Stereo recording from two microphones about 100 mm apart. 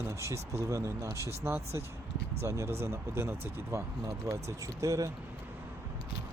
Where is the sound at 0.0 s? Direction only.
30° right (ahead or behind).